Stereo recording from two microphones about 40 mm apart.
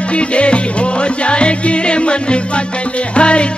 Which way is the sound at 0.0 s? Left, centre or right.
Left.